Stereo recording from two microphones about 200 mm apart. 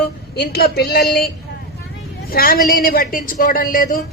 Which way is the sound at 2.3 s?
45° left (ahead or behind).